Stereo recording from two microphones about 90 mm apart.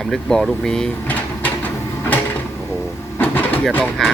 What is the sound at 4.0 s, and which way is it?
Speech, 5° left (ahead or behind).